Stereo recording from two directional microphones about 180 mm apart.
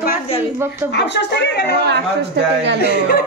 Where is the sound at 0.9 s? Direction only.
75° left (ahead or behind).